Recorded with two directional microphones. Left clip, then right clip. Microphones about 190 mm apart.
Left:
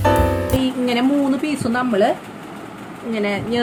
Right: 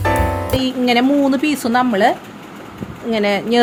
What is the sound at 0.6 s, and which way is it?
Speech, 40° right (ahead or behind).